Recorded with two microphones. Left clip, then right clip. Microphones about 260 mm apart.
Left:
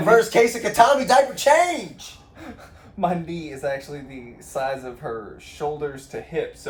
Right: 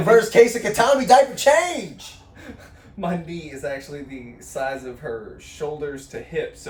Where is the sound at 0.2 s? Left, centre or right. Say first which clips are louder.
Right 3 dB; centre.